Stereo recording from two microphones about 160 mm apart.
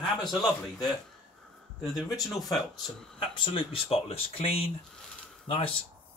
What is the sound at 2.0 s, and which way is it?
Speech, centre (ahead or behind).